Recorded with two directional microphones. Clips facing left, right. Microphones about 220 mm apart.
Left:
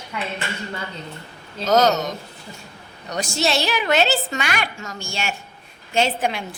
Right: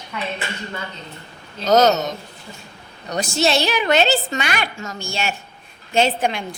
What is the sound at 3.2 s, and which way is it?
A woman's voice, centre (ahead or behind).